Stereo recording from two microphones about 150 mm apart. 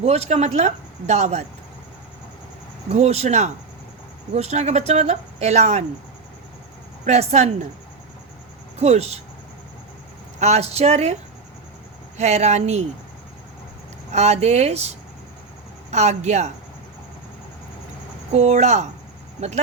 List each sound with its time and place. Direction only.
0.0 s speech: 45° right (ahead or behind)
2.9 s speech: 45° right (ahead or behind)
7.0 s speech: 45° right (ahead or behind)
8.8 s speech: 45° right (ahead or behind)
10.4 s speech: 45° right (ahead or behind)
14.1 s speech: 50° right (ahead or behind)
18.3 s speech: 45° right (ahead or behind)